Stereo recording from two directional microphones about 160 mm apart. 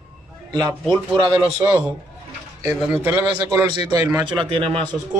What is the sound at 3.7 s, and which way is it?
A man's voice, 25° right (ahead or behind).